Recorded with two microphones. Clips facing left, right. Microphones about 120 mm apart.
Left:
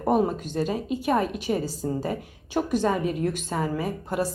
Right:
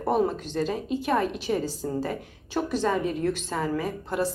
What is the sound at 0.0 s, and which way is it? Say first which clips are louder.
A woman's voice: left 2 dB; 10° left (ahead or behind).